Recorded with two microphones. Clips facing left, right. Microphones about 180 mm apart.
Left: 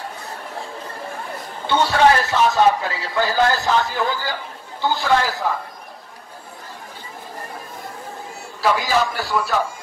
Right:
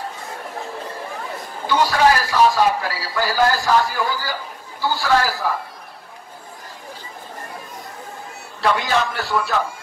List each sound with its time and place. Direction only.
1.7 s speech: 25° left (ahead or behind)
8.5 s a man's voice: centre (ahead or behind)